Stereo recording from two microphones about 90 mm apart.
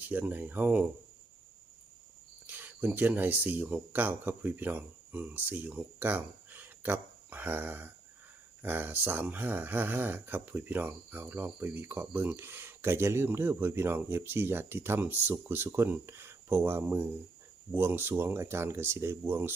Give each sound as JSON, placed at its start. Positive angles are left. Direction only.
{"t": 0.0, "sound": "speech", "side_deg": -20}
{"t": 2.5, "sound": "speech", "side_deg": -20}